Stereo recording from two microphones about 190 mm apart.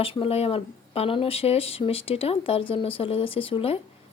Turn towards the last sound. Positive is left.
turn(degrees=30)  # may be behind; listen again after turning